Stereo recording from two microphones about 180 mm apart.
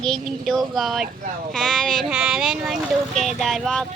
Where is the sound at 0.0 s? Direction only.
Centre (ahead or behind).